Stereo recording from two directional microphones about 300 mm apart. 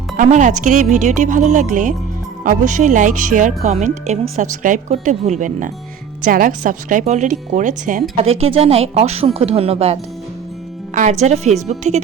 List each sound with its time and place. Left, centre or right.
0.2 s speech: right